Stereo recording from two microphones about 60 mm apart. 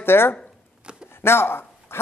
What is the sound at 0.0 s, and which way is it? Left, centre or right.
A man's voice, left.